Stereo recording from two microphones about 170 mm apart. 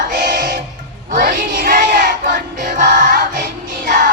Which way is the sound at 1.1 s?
55° right (ahead or behind).